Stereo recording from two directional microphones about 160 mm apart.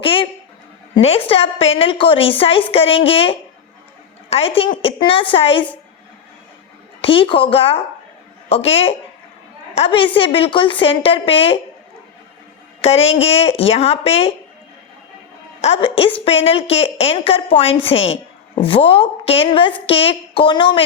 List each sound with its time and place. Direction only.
0.0 s a sound: 35° left (ahead or behind)
0.9 s a woman's voice: 40° left (ahead or behind)
7.0 s a woman's voice: 35° left (ahead or behind)
12.8 s a woman's voice: 40° left (ahead or behind)
15.6 s a woman's voice: 35° left (ahead or behind)